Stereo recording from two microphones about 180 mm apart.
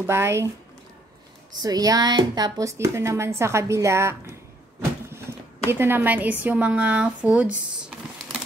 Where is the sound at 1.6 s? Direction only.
20° right (ahead or behind).